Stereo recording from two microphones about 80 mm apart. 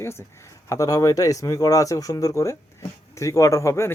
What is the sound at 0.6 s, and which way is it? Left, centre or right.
Speech, left.